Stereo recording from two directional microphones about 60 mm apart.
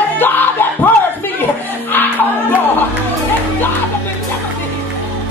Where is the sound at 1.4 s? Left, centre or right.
Left.